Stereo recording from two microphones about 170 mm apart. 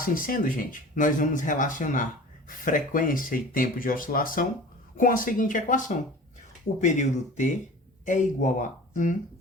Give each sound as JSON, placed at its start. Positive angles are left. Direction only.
{"t": 0.0, "sound": "speech", "side_deg": 55}